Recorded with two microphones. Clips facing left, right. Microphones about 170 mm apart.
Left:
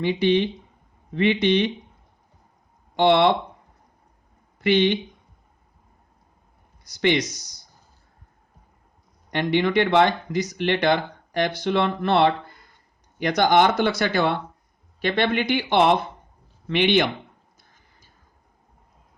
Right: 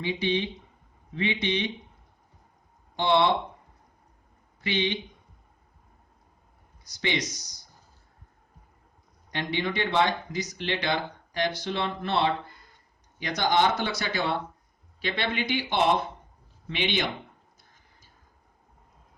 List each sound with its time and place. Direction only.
0.0 s speech: 65° left (ahead or behind)
2.9 s speech: 70° left (ahead or behind)
4.6 s speech: 60° left (ahead or behind)
9.3 s speech: 65° left (ahead or behind)